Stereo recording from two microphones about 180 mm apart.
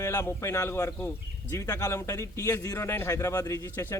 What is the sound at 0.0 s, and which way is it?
A man's voice, 15° left (ahead or behind).